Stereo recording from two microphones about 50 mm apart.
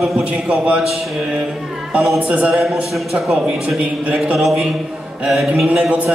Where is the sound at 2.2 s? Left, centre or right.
Right.